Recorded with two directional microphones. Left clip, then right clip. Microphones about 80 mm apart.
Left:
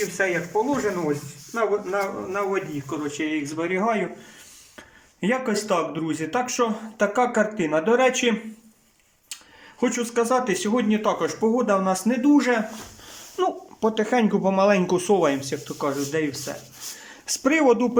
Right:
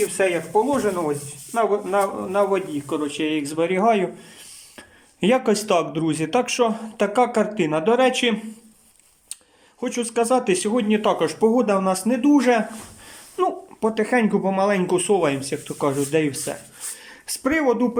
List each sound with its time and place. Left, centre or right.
0.2 s a man's voice: right
5.2 s speech: right; by 8.4 s centre
9.8 s speech: right
12.2 s a man's voice: right
13.3 s speech: centre
15.8 s a man's voice: right
17.1 s speech: centre